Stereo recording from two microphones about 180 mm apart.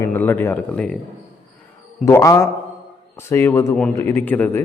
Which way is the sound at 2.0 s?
15° left (ahead or behind).